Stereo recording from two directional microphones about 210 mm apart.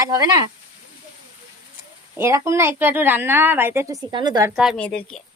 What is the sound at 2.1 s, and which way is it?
A woman's voice, 15° right (ahead or behind).